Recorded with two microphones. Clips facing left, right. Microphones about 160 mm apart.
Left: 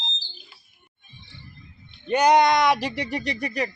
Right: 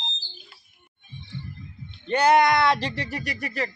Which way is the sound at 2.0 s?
15° left (ahead or behind).